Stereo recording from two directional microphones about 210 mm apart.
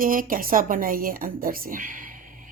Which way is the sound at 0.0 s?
40° right (ahead or behind).